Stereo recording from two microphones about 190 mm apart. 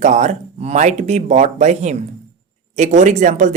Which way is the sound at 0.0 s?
40° right (ahead or behind).